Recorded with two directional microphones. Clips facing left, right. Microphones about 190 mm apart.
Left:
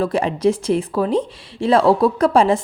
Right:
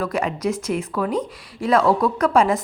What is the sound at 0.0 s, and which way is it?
A woman's voice, 30° left (ahead or behind).